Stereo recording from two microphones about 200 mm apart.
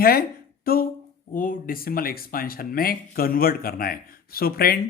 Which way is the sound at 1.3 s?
45° left (ahead or behind).